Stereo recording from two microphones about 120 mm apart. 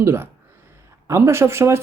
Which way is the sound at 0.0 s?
20° right (ahead or behind).